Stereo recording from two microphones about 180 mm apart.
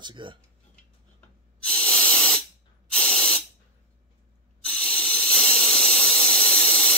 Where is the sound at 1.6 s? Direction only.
5° left (ahead or behind).